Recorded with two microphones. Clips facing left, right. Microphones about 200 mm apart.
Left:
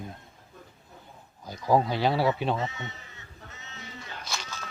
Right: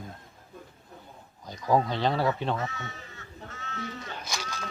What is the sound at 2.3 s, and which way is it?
Crow, 15° left (ahead or behind).